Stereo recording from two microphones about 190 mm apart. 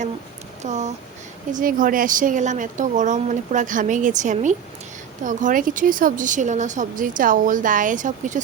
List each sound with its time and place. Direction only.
0.6 s a woman's voice: 35° right (ahead or behind)